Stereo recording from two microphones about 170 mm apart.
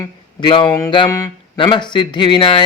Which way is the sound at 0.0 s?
30° left (ahead or behind).